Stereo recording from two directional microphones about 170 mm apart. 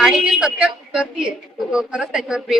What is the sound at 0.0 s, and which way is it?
A woman's voice, centre (ahead or behind).